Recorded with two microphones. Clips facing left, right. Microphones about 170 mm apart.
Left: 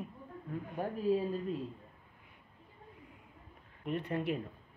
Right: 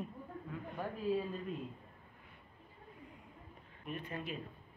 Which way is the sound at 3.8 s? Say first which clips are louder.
Left 8 dB; 70° left (ahead or behind).